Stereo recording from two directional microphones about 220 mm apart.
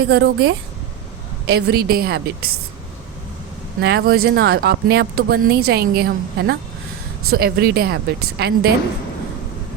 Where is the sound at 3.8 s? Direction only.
50° right (ahead or behind).